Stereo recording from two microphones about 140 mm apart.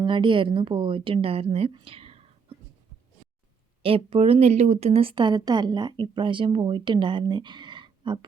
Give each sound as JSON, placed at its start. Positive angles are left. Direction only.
{"t": 0.0, "sound": "speech", "side_deg": -35}
{"t": 3.8, "sound": "speech", "side_deg": -40}